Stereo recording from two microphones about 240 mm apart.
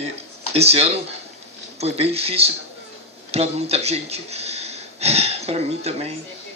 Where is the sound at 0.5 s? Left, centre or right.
Right.